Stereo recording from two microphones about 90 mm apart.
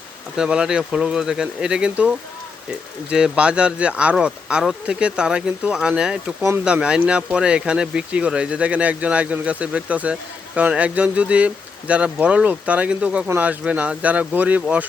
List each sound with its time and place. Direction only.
0.3 s speech: 10° right (ahead or behind)
3.1 s speech: 10° right (ahead or behind)